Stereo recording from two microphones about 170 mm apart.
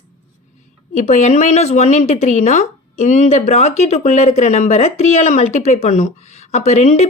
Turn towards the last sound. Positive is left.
turn(degrees=40)  # may be behind; listen again after turning